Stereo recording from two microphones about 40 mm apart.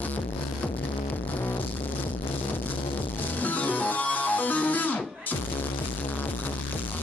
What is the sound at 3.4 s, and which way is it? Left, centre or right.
Music, left.